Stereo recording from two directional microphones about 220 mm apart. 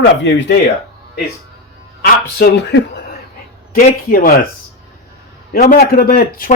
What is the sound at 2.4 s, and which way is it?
Speech, 50° left (ahead or behind).